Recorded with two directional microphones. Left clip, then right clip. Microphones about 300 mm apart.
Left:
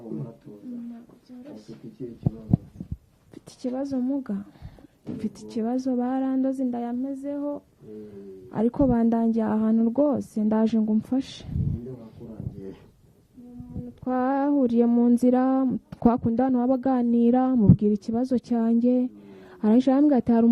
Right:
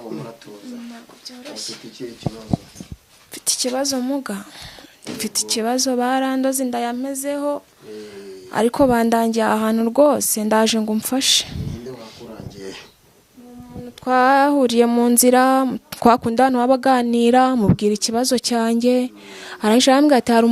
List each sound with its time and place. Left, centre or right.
0.0 s a sound: centre
1.5 s a woman's voice: centre
2.2 s speech: centre
3.3 s a woman's voice: centre
9.9 s speech: centre
11.2 s a woman's voice: centre
11.9 s a sound: centre
14.1 s a woman's voice: centre